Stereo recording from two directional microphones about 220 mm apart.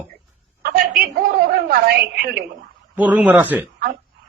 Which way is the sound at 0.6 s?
40° right (ahead or behind).